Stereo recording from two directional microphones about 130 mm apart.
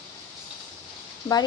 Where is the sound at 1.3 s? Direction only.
25° left (ahead or behind).